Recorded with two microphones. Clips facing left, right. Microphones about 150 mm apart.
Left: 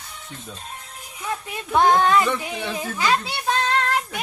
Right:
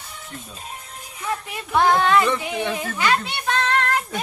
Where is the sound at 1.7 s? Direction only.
20° left (ahead or behind).